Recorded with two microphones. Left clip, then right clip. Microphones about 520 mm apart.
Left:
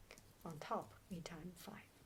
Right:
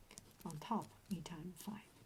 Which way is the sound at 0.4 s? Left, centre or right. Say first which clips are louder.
Right 1 dB; left.